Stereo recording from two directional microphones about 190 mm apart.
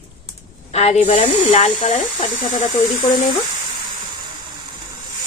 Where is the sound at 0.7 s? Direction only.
35° left (ahead or behind).